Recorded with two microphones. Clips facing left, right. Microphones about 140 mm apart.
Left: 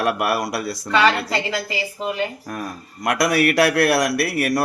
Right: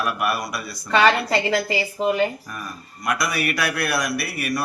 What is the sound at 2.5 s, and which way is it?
A man's voice, 80° left.